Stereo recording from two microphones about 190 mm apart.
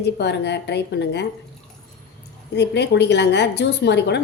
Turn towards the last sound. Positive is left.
turn(degrees=65)  # may be behind; listen again after turning